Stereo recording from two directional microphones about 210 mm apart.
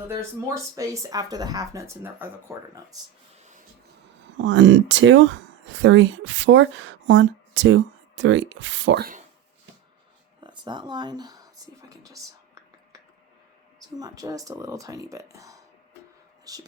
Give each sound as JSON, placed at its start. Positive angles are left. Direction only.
{"t": 0.1, "sound": "speech", "side_deg": -15}
{"t": 4.3, "sound": "speech", "side_deg": -60}
{"t": 10.4, "sound": "whispering", "side_deg": -20}
{"t": 14.0, "sound": "speech", "side_deg": -15}
{"t": 16.4, "sound": "whispering", "side_deg": -15}